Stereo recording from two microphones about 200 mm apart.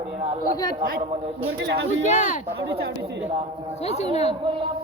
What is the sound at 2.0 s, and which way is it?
Speech, 40° left (ahead or behind).